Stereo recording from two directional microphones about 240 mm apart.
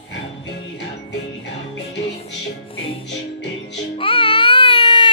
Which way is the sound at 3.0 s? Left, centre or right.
Left.